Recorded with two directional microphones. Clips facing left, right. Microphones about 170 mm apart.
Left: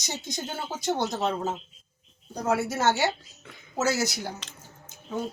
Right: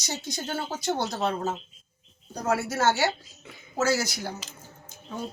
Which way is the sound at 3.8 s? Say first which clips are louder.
Right 1 dB; 20° left (ahead or behind).